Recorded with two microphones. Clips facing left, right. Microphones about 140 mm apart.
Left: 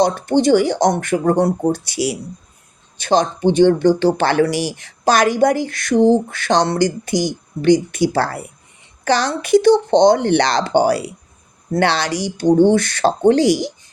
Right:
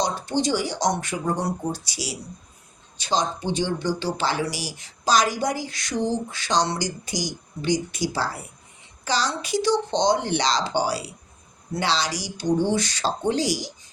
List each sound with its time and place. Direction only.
0.0 s speech: 55° left (ahead or behind)